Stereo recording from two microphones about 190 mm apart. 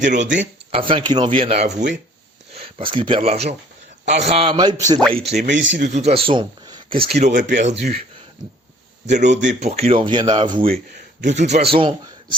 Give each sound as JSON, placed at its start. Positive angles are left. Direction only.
{"t": 0.0, "sound": "speech", "side_deg": -45}
{"t": 0.7, "sound": "speech", "side_deg": -25}
{"t": 5.1, "sound": "speech", "side_deg": -35}
{"t": 5.5, "sound": "speech", "side_deg": -70}
{"t": 5.8, "sound": "speech", "side_deg": -35}
{"t": 7.2, "sound": "speech", "side_deg": -35}
{"t": 9.0, "sound": "speech", "side_deg": -40}
{"t": 11.2, "sound": "speech", "side_deg": -40}